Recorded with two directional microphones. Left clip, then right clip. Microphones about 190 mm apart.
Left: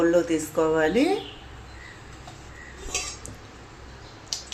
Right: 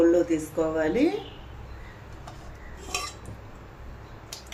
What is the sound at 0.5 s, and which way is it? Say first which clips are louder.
Speech: left 5 dB; 50° left (ahead or behind).